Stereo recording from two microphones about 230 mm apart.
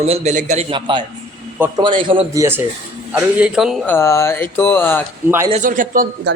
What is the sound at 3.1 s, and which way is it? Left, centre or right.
Speech, centre.